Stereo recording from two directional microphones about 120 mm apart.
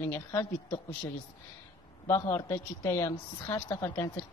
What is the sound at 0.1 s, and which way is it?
Speech, 25° left (ahead or behind).